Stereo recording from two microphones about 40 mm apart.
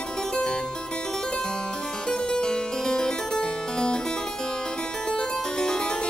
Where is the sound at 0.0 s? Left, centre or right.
Centre.